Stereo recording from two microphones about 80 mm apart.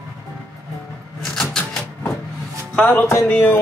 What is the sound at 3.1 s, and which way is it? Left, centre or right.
Speech, left.